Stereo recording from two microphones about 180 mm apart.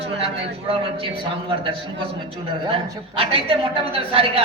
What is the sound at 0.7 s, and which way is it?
A man's voice, 30° right (ahead or behind).